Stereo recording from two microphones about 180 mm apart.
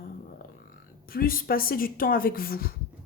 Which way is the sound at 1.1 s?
55° left (ahead or behind).